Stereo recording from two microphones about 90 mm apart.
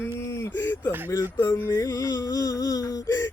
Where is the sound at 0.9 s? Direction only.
20° right (ahead or behind).